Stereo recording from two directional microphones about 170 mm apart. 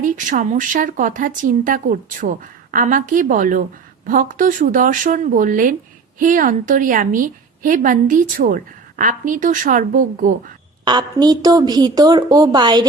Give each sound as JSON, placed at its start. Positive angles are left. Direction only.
{"t": 0.0, "sound": "a woman's voice", "side_deg": -50}
{"t": 10.8, "sound": "a woman's voice", "side_deg": -25}